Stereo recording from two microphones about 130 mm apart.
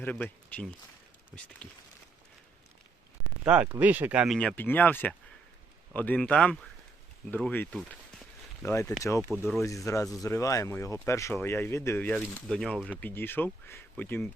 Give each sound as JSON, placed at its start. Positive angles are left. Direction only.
{"t": 0.0, "sound": "speech", "side_deg": 10}
{"t": 3.4, "sound": "speech", "side_deg": -10}
{"t": 4.4, "sound": "speech", "side_deg": 10}
{"t": 8.6, "sound": "speech", "side_deg": 20}